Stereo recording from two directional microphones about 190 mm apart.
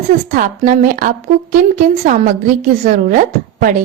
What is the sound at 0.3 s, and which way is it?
A woman's voice, 45° right (ahead or behind).